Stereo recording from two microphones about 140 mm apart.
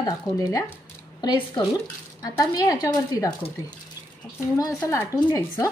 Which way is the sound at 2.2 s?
25° left (ahead or behind).